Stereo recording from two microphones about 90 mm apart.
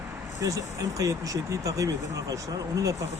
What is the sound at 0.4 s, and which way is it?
Speech, 40° right (ahead or behind).